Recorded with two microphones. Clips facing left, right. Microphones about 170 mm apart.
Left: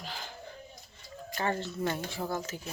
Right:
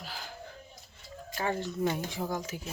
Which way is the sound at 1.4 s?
10° right (ahead or behind).